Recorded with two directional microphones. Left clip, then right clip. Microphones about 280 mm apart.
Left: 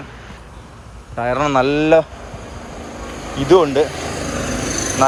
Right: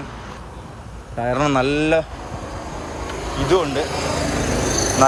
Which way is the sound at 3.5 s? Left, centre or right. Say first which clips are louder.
Left 7 dB; centre.